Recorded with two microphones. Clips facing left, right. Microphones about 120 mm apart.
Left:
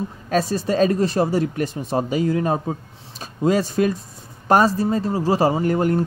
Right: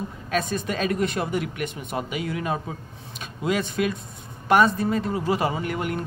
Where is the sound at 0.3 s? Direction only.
35° left (ahead or behind).